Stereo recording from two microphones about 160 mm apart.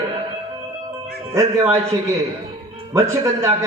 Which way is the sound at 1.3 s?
20° right (ahead or behind).